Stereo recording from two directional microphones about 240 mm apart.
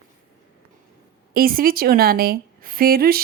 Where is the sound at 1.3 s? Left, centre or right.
Right.